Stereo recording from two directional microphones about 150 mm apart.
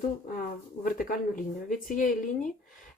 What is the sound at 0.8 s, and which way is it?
Speech, 65° left (ahead or behind).